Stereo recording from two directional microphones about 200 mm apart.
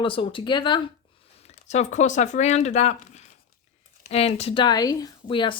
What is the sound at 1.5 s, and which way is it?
A woman's voice, 35° left (ahead or behind).